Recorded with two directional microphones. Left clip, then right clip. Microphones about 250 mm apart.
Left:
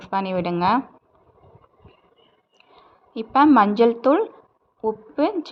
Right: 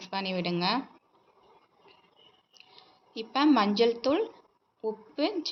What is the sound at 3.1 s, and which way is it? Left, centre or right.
A woman's voice, left.